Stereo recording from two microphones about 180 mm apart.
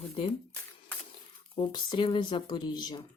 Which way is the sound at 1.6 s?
25° left (ahead or behind).